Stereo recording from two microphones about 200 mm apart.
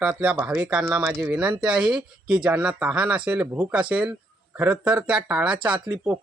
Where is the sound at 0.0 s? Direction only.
5° right (ahead or behind).